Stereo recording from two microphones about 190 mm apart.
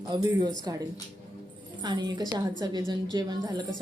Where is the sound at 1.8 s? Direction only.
20° right (ahead or behind).